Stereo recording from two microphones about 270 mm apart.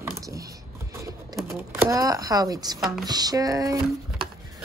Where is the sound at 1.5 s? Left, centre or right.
Centre.